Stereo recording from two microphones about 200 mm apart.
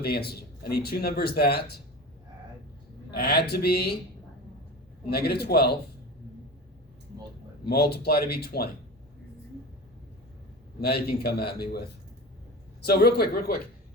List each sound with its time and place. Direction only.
0.0 s speech: 50° left (ahead or behind)
3.1 s speech: 50° left (ahead or behind)
5.0 s speech: 50° left (ahead or behind)
7.7 s speech: 50° left (ahead or behind)
10.8 s speech: 50° left (ahead or behind)
12.8 s speech: 50° left (ahead or behind)